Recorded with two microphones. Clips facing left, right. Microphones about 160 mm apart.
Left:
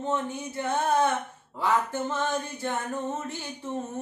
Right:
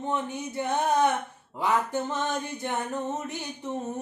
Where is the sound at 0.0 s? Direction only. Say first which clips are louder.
Left 1 dB; 15° right (ahead or behind).